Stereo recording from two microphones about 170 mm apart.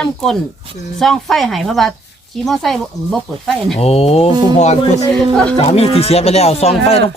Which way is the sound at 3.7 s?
35° left (ahead or behind).